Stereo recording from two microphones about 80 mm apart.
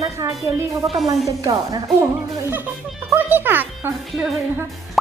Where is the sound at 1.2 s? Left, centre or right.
Right.